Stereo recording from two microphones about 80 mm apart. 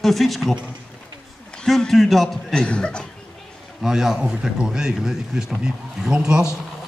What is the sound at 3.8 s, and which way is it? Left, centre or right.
Speech, centre.